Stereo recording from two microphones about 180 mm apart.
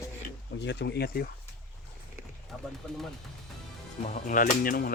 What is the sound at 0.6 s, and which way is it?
Speech, 75° left (ahead or behind).